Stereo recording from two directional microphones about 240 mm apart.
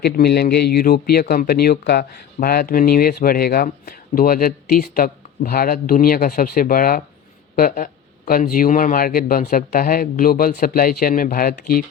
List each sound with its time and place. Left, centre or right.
0.0 s speech: left